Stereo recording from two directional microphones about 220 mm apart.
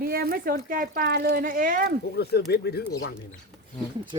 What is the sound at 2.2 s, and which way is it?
Speech, 45° left (ahead or behind).